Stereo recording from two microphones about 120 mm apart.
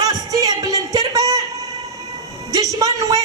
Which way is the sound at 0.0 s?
35° right (ahead or behind).